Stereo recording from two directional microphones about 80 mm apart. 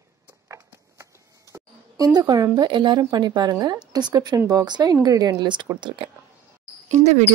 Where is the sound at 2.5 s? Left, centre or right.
Right.